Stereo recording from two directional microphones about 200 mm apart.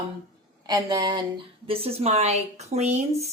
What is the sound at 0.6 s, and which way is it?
A woman's voice, 20° right (ahead or behind).